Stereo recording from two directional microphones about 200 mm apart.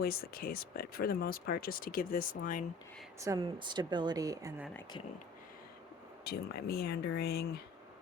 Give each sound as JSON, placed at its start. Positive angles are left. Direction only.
{"t": 0.0, "sound": "speech", "side_deg": 50}
{"t": 3.2, "sound": "speech", "side_deg": -20}
{"t": 6.2, "sound": "speech", "side_deg": 50}